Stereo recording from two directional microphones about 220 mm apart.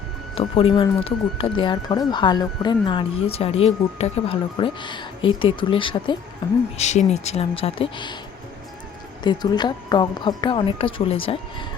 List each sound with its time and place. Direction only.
0.3 s speech: 25° left (ahead or behind)
6.7 s speech: 30° left (ahead or behind)
9.2 s speech: 20° left (ahead or behind)